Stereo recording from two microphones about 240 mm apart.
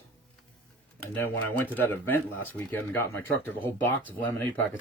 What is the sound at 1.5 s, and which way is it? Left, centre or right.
Speech, centre.